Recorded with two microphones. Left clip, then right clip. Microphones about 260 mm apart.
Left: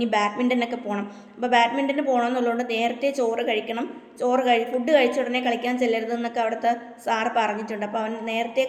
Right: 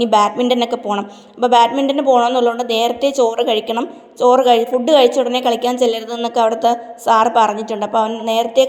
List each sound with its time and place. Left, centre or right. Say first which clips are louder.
0.1 s a woman's voice: right 9 dB; right